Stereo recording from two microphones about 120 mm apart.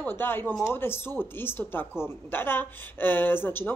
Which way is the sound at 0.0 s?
20° left (ahead or behind).